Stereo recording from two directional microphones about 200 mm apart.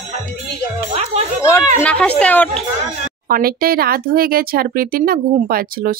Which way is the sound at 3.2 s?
45° right (ahead or behind).